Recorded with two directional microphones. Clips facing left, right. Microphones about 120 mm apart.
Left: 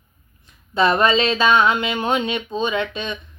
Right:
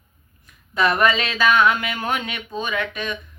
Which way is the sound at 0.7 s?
25° left (ahead or behind).